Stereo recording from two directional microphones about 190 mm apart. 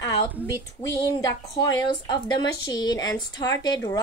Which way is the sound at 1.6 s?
20° left (ahead or behind).